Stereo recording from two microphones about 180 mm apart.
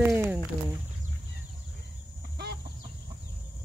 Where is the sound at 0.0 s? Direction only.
10° right (ahead or behind).